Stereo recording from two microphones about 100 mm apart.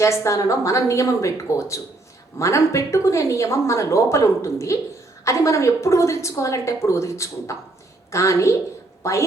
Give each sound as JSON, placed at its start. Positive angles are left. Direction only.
{"t": 0.0, "sound": "a woman's voice", "side_deg": 30}